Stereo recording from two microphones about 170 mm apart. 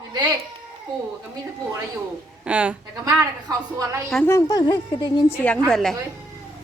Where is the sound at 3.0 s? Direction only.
20° right (ahead or behind).